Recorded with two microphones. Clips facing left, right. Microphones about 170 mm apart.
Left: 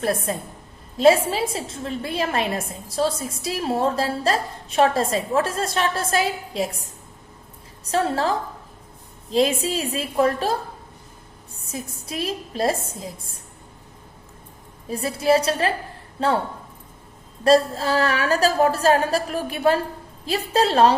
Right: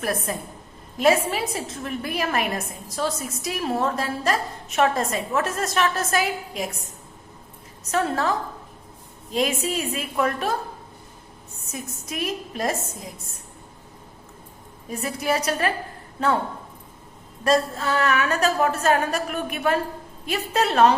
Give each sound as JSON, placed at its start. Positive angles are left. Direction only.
{"t": 0.3, "sound": "a woman's voice", "side_deg": 25}
{"t": 7.9, "sound": "a woman's voice", "side_deg": 30}
{"t": 11.6, "sound": "a woman's voice", "side_deg": 30}
{"t": 14.8, "sound": "a woman's voice", "side_deg": 30}
{"t": 17.4, "sound": "a woman's voice", "side_deg": 30}